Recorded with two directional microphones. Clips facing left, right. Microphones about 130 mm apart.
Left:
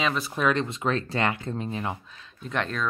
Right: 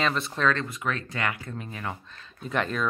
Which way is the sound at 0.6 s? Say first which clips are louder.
Left 4 dB; 30° left (ahead or behind).